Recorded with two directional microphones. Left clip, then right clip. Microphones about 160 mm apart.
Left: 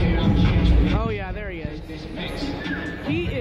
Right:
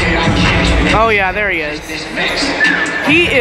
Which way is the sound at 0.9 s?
20° right (ahead or behind).